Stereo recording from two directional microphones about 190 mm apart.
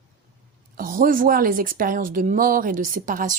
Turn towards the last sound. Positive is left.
turn(degrees=-45)  # may be behind; listen again after turning